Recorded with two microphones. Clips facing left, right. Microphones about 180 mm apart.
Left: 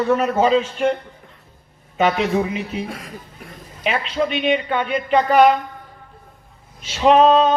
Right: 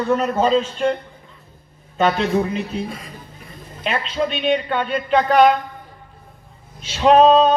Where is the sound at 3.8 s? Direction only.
10° left (ahead or behind).